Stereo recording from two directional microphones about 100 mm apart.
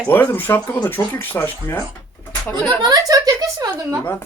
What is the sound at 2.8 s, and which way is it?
Speech, 40° right (ahead or behind).